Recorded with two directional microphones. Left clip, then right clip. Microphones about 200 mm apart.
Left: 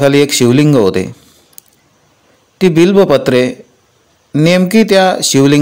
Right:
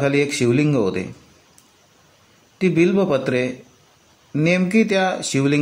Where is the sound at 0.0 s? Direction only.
40° left (ahead or behind).